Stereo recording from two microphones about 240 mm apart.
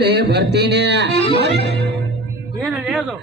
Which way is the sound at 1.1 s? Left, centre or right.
Left.